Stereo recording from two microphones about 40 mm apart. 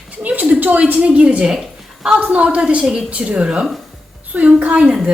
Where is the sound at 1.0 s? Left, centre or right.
Right.